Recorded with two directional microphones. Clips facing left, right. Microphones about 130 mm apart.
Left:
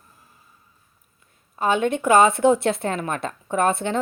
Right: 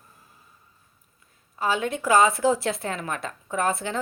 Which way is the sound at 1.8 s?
25° left (ahead or behind).